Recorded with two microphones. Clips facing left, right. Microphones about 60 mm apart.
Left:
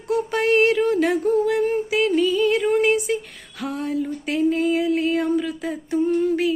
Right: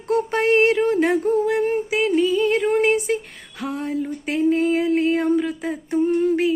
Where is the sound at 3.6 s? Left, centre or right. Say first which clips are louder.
Even; right.